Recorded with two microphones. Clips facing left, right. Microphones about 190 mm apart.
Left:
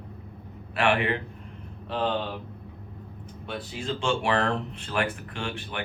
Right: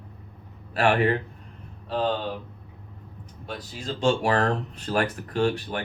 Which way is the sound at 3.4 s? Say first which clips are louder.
Left 2 dB; 40° right (ahead or behind).